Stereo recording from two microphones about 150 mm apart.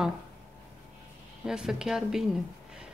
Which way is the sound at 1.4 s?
5° right (ahead or behind).